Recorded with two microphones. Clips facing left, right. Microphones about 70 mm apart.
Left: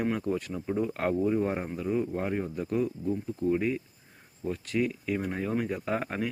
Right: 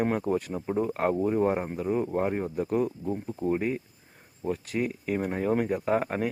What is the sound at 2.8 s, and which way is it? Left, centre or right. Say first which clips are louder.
Speech: right 1 dB; right.